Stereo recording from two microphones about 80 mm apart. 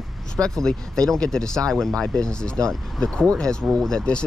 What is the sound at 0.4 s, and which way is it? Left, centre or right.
Speech, centre.